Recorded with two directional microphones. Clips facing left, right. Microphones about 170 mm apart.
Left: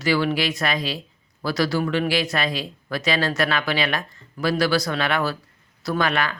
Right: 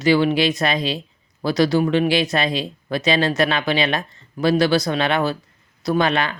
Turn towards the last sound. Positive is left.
turn(degrees=-25)  # may be behind; listen again after turning